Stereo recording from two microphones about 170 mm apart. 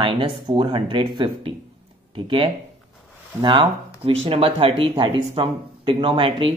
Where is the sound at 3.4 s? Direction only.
30° right (ahead or behind).